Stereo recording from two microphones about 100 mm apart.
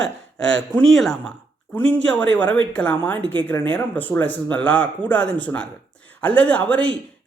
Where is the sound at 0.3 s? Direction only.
10° left (ahead or behind).